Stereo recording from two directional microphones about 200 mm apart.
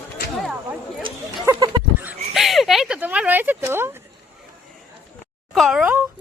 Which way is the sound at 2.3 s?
Centre (ahead or behind).